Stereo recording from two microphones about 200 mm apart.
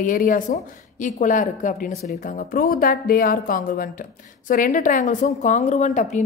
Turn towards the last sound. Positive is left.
turn(degrees=35)  # may be behind; listen again after turning